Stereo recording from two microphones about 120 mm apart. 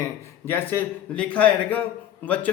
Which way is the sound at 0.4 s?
15° left (ahead or behind).